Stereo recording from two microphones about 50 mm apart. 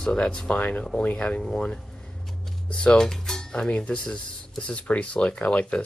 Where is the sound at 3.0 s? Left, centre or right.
Centre.